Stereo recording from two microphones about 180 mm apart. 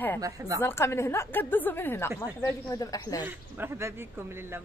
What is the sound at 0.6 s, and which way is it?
Speech, 15° left (ahead or behind).